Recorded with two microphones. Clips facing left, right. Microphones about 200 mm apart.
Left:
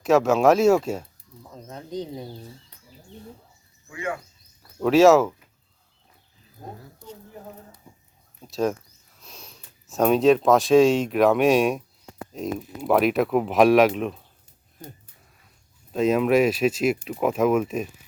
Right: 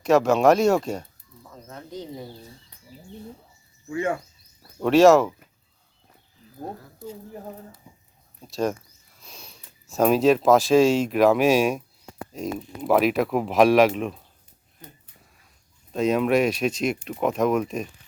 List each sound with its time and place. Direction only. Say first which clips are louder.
0.0 s speech: even; centre (ahead or behind)
1.5 s speech: left 3 dB; 20° left (ahead or behind)
4.8 s speech: even; centre (ahead or behind)
8.4 s speech: left 1 dB; centre (ahead or behind)
15.9 s speech: left 1 dB; centre (ahead or behind)